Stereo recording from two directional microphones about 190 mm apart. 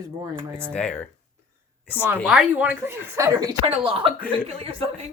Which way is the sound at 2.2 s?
5° right (ahead or behind).